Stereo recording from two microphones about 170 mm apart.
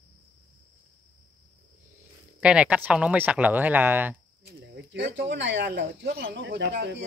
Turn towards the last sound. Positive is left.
turn(degrees=-80)